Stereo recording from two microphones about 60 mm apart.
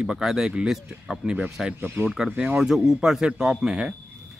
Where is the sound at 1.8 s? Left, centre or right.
Right.